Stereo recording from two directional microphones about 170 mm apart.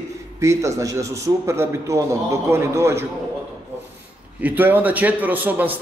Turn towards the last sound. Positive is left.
turn(degrees=-10)  # may be behind; listen again after turning